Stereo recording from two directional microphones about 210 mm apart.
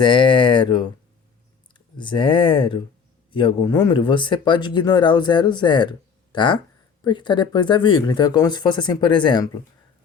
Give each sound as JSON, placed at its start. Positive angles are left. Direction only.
{"t": 0.0, "sound": "speech", "side_deg": 25}
{"t": 2.0, "sound": "speech", "side_deg": 20}